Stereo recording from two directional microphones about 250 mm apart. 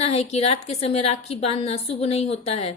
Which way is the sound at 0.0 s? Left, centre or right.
Left.